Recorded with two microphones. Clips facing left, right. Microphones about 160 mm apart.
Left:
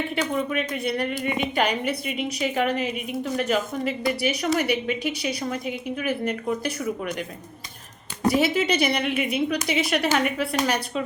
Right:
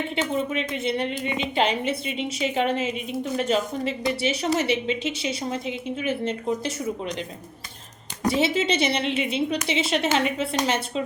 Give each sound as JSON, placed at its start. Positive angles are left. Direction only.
{"t": 0.2, "sound": "a woman's voice", "side_deg": -25}
{"t": 8.3, "sound": "a woman's voice", "side_deg": -25}